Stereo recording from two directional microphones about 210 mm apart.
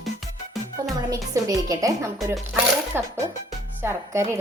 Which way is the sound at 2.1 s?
Centre (ahead or behind).